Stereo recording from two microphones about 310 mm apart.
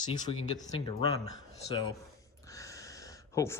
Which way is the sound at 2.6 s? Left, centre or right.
Centre.